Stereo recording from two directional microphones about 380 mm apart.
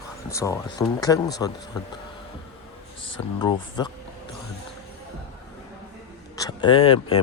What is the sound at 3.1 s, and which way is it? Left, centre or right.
Speech, centre.